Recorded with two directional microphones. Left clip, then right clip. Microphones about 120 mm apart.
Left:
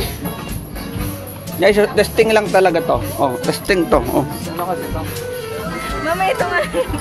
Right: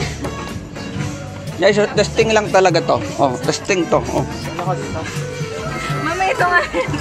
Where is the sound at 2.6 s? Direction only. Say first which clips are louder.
Even; 5° right (ahead or behind).